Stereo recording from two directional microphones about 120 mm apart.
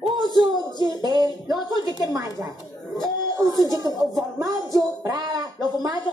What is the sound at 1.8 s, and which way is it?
Speech, 35° left (ahead or behind).